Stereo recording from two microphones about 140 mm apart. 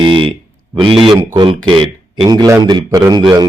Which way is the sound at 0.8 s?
40° right (ahead or behind).